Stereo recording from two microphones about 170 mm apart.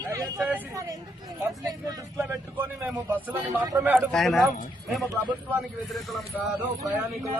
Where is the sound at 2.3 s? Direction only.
10° right (ahead or behind).